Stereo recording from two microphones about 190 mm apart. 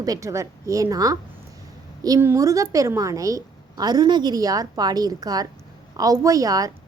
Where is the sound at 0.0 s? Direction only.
15° right (ahead or behind).